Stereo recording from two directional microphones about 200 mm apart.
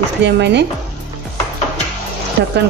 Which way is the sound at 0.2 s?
60° right (ahead or behind).